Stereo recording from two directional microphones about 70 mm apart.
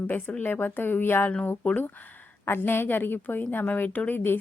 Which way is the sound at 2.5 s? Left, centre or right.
Left.